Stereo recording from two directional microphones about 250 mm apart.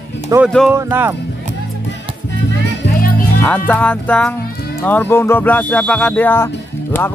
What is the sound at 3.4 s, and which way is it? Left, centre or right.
Speech, centre.